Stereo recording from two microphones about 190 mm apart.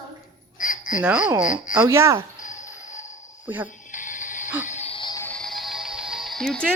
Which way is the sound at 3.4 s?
10° right (ahead or behind).